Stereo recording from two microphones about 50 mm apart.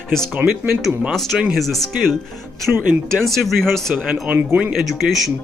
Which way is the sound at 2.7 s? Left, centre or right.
Right.